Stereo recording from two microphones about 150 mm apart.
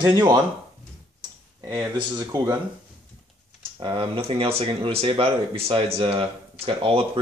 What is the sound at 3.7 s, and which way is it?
Speech, 35° right (ahead or behind).